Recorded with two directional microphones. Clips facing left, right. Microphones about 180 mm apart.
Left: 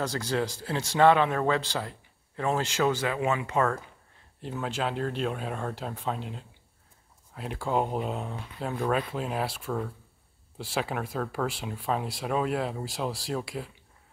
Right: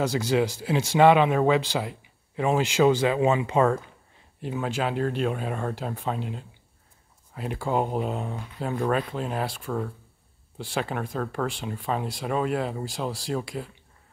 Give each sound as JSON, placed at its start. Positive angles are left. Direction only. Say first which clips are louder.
{"t": 0.0, "sound": "speech", "louder": "right 5 dB", "side_deg": -10}
{"t": 4.4, "sound": "speech", "louder": "right 3 dB", "side_deg": -5}